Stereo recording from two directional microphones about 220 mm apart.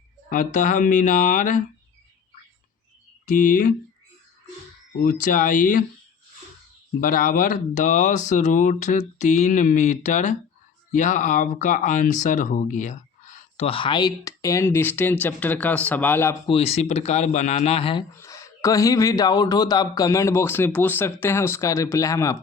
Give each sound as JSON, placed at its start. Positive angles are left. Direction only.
{"t": 0.3, "sound": "speech", "side_deg": 35}
{"t": 3.2, "sound": "speech", "side_deg": 35}
{"t": 4.9, "sound": "speech", "side_deg": 40}
{"t": 7.0, "sound": "speech", "side_deg": 40}
{"t": 16.5, "sound": "speech", "side_deg": 25}
{"t": 18.1, "sound": "speech", "side_deg": 15}